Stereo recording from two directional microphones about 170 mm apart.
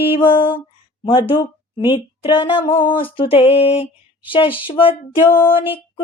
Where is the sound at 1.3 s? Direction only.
30° left (ahead or behind).